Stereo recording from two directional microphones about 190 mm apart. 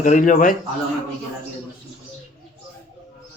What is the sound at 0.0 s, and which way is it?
Speech, 45° left (ahead or behind).